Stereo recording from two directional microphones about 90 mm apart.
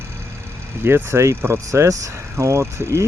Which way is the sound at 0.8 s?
25° right (ahead or behind).